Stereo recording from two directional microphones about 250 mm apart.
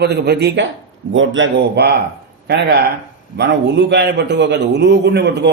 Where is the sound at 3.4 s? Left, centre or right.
Right.